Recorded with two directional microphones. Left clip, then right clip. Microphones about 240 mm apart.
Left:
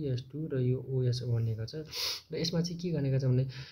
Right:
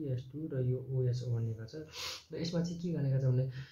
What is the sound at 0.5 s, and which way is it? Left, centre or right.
Speech, left.